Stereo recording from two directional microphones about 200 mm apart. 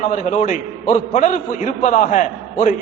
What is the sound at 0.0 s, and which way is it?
A man's voice, 35° left (ahead or behind).